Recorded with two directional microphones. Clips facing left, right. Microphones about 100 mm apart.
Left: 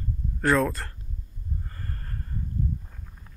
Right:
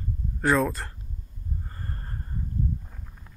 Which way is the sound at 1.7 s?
25° right (ahead or behind).